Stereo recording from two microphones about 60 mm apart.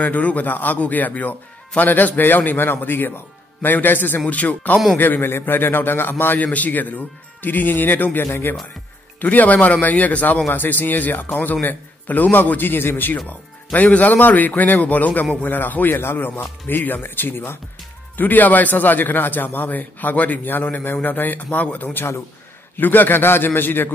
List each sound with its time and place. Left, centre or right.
0.0 s a man's voice: left
15.9 s a man's voice: left